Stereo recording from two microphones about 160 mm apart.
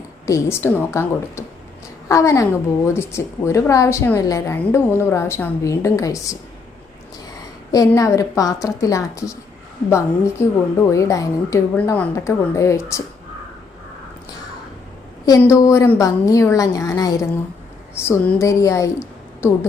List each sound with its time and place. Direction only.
0.3 s a woman's voice: 15° left (ahead or behind)
7.7 s a woman's voice: 20° left (ahead or behind)
15.4 s a woman's voice: 20° left (ahead or behind)